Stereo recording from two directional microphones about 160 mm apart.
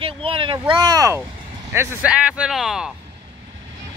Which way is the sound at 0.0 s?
35° right (ahead or behind).